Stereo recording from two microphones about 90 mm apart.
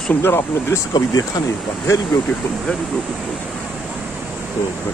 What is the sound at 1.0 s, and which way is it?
Speech, 45° left (ahead or behind).